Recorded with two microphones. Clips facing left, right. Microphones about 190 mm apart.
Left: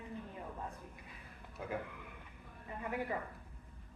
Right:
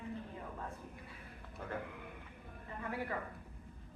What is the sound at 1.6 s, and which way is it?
Speech, 5° left (ahead or behind).